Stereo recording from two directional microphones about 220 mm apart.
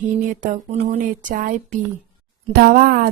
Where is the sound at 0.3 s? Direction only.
35° right (ahead or behind).